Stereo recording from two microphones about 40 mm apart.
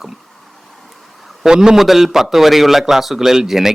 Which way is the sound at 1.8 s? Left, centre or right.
Centre.